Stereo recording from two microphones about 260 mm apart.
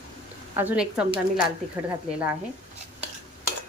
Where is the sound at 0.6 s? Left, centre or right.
Centre.